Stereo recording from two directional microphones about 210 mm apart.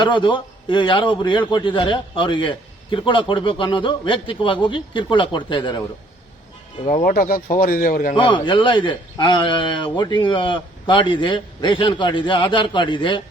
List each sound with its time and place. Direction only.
0.0 s a man's voice: 20° left (ahead or behind)
6.8 s a man's voice: 40° left (ahead or behind)
8.1 s a man's voice: 25° left (ahead or behind)